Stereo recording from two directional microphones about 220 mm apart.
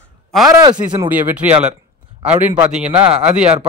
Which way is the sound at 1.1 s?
5° right (ahead or behind).